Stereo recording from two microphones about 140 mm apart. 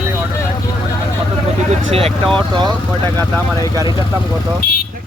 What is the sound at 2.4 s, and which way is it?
Speech, 35° right (ahead or behind).